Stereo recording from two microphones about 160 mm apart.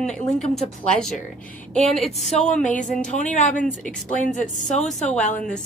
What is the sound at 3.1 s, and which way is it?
Speech, 50° left (ahead or behind).